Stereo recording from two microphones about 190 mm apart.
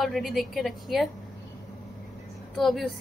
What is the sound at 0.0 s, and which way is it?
A woman's voice, centre (ahead or behind).